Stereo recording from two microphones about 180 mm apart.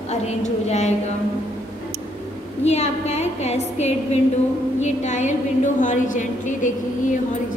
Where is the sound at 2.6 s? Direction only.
40° left (ahead or behind).